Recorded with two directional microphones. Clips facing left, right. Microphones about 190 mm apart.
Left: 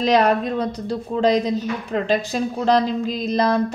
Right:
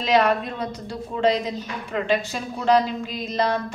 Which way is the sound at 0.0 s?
40° left (ahead or behind).